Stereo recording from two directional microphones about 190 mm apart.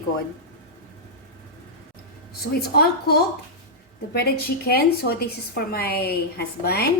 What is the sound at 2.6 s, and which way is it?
A woman's voice, 55° left (ahead or behind).